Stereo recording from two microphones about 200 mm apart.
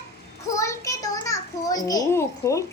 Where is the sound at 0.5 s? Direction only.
15° left (ahead or behind).